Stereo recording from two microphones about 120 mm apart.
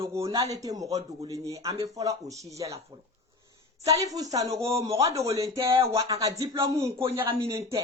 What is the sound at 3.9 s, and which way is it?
A woman's voice, 30° right (ahead or behind).